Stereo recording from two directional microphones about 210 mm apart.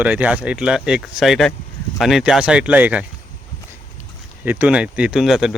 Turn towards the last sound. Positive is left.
turn(degrees=0)  # may be behind; listen again after turning